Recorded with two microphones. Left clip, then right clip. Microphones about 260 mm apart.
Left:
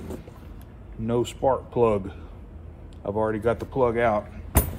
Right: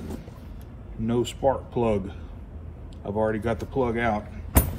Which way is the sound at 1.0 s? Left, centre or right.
Left.